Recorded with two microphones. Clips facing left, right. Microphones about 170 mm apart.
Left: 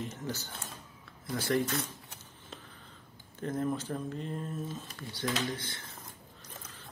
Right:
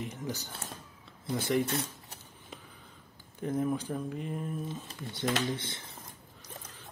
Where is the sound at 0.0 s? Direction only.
15° right (ahead or behind); by 2.1 s 30° right (ahead or behind).